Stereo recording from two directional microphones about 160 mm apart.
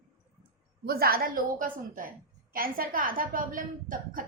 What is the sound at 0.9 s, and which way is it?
A woman's voice, 70° right (ahead or behind).